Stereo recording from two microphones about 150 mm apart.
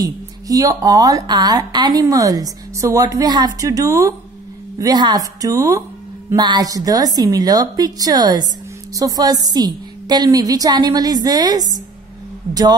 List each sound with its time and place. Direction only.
0.0 s a woman's voice: 25° right (ahead or behind)